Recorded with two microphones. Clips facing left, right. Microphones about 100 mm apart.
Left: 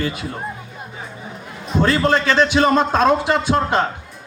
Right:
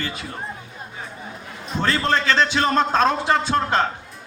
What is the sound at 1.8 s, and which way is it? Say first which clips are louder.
A man's voice: left 4 dB; 15° left (ahead or behind).